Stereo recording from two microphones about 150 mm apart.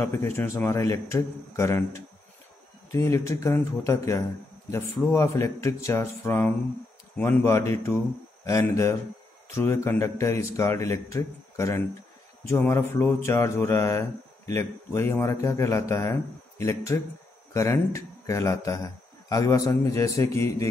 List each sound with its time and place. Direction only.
0.1 s a man's voice: 15° left (ahead or behind)